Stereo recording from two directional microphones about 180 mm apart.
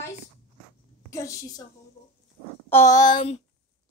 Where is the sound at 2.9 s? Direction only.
20° left (ahead or behind).